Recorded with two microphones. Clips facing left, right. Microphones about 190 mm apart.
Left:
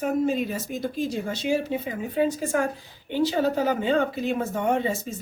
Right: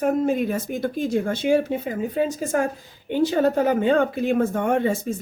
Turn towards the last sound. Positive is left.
turn(degrees=-55)  # may be behind; listen again after turning